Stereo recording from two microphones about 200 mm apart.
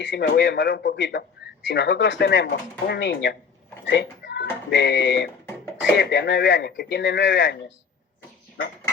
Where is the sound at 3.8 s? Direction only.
60° left (ahead or behind).